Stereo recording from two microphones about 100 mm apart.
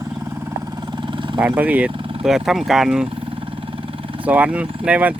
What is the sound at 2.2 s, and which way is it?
Speech, 5° right (ahead or behind).